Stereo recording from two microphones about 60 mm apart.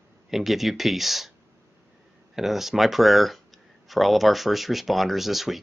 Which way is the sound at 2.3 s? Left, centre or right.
Centre.